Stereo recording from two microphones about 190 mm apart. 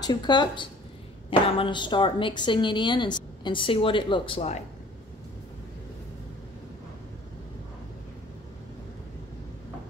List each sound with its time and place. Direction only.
0.0 s a woman's voice: 20° left (ahead or behind)